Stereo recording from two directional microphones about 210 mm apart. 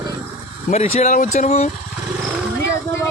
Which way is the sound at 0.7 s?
30° left (ahead or behind).